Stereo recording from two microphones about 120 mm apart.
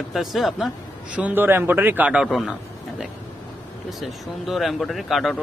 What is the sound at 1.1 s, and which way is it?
A man's voice, 15° right (ahead or behind).